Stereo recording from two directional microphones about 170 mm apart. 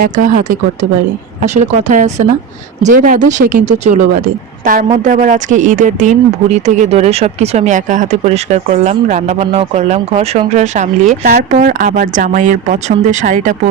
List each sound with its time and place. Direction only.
0.0 s speech: 50° right (ahead or behind)